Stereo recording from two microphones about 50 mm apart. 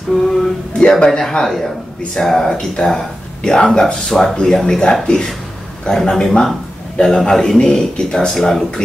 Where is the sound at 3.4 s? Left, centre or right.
Centre.